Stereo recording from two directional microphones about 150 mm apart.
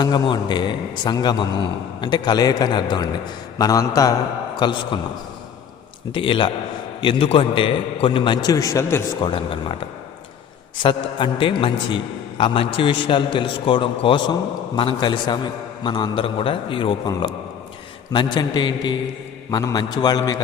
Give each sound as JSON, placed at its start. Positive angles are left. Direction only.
{"t": 0.0, "sound": "a man's voice", "side_deg": 30}
{"t": 6.1, "sound": "a man's voice", "side_deg": 35}
{"t": 9.2, "sound": "a man's voice", "side_deg": 35}
{"t": 10.8, "sound": "a man's voice", "side_deg": 35}